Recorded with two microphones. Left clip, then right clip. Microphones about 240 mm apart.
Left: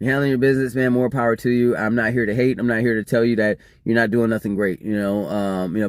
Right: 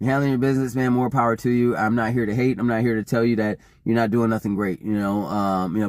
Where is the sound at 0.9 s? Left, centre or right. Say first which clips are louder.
Left 1 dB; right.